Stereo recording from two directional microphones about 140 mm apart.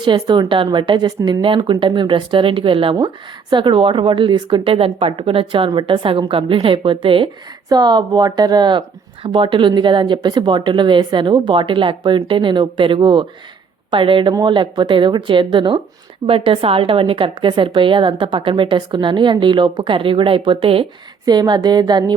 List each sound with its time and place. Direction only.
0.0 s a woman's voice: 35° right (ahead or behind)